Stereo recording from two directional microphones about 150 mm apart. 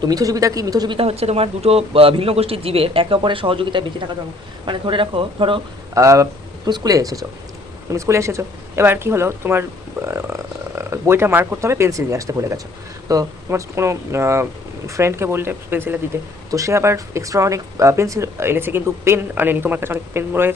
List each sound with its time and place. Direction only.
0.0 s speech: 25° right (ahead or behind)
0.9 s a man's voice: 40° right (ahead or behind)
5.9 s speech: 20° right (ahead or behind)